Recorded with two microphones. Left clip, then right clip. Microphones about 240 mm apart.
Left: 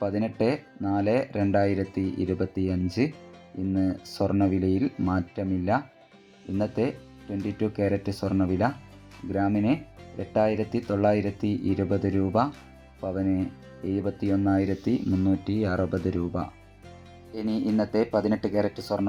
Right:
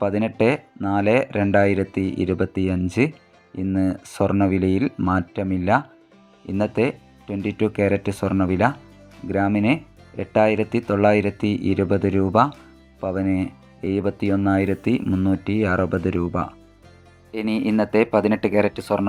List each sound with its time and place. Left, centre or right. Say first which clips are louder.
0.0 s speech: right 6 dB; centre